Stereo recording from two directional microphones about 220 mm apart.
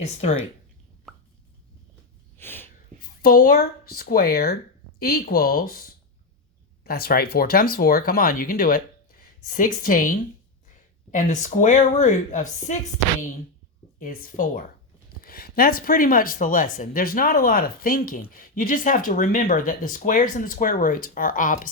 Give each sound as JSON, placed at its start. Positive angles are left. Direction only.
{"t": 2.4, "sound": "a sound", "side_deg": 10}
{"t": 3.0, "sound": "speech", "side_deg": 40}
{"t": 14.0, "sound": "speech", "side_deg": 40}